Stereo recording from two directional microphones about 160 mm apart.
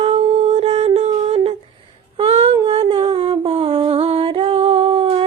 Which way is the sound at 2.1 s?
35° right (ahead or behind).